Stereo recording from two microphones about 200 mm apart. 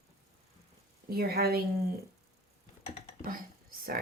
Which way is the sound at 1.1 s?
50° right (ahead or behind).